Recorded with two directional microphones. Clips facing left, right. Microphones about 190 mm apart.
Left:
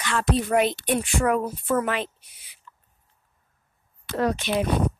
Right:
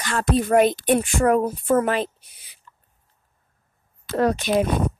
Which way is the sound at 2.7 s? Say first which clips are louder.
Left 2 dB; 45° right (ahead or behind).